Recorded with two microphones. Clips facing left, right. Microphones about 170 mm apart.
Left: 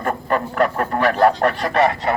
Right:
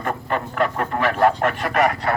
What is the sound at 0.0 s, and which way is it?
Speech, 45° left (ahead or behind).